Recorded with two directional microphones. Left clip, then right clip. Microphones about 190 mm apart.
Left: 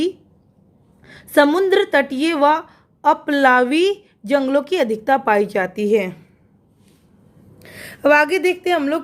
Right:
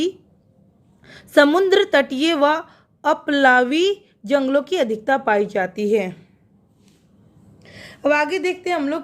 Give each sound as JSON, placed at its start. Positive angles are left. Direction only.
{"t": 1.0, "sound": "a woman's voice", "side_deg": 0}
{"t": 7.7, "sound": "a woman's voice", "side_deg": 25}